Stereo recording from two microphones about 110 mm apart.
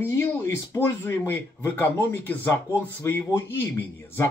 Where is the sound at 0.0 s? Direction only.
20° left (ahead or behind).